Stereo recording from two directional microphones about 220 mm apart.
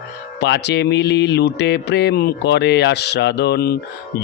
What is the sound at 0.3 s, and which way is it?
Mantra, 50° left (ahead or behind).